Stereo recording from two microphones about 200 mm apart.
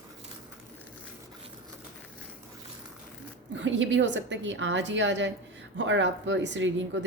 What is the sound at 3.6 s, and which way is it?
A woman's voice, 70° right (ahead or behind).